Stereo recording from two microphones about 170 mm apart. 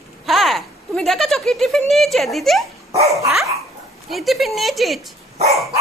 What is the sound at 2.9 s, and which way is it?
Dog, 20° right (ahead or behind).